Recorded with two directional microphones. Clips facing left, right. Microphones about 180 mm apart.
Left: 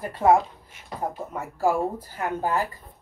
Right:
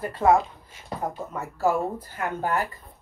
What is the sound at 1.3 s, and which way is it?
Speech, 10° left (ahead or behind).